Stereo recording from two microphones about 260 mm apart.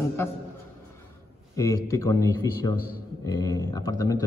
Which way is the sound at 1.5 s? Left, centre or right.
Centre.